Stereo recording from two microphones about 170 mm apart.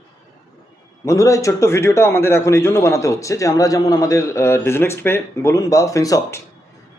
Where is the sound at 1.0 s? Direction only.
20° left (ahead or behind).